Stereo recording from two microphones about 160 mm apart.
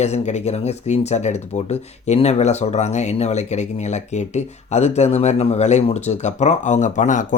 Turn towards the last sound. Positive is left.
turn(degrees=50)  # may be behind; listen again after turning